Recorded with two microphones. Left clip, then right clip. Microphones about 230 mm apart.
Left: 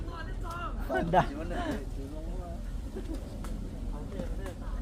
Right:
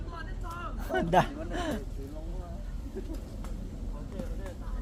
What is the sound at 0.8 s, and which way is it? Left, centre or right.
Speech, right.